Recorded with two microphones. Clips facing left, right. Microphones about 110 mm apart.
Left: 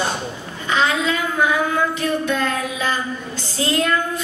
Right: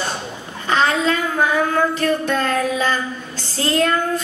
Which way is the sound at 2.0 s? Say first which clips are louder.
Right 2 dB; 40° right (ahead or behind).